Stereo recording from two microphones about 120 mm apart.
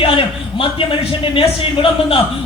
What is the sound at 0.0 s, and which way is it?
Speech, 50° left (ahead or behind).